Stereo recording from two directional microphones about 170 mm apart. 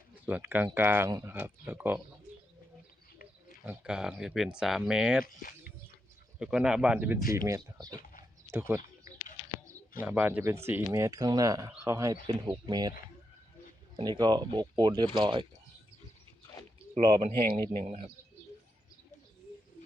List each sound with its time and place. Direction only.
0.3 s speech: 10° right (ahead or behind)
3.7 s speech: 5° right (ahead or behind)
5.2 s speech: 55° left (ahead or behind)
6.4 s speech: 5° right (ahead or behind)
10.0 s speech: 10° right (ahead or behind)
13.9 s speech: 25° right (ahead or behind)
17.0 s speech: 30° right (ahead or behind)